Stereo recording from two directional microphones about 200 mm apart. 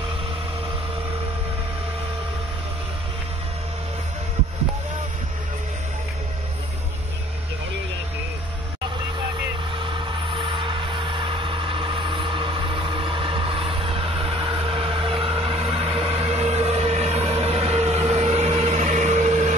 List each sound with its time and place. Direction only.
9.8 s vehicle: 25° right (ahead or behind)